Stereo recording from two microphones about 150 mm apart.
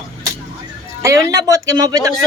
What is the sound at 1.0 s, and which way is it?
Speech, 20° right (ahead or behind).